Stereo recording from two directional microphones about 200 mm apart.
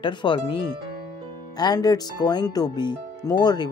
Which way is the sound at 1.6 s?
20° left (ahead or behind).